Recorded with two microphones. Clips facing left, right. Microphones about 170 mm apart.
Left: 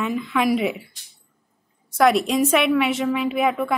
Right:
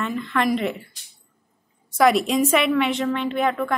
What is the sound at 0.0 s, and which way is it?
Speech, 5° left (ahead or behind).